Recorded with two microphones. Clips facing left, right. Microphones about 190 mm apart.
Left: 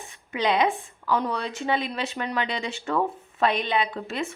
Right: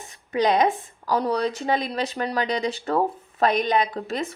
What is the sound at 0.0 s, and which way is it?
A woman's voice, 40° right (ahead or behind).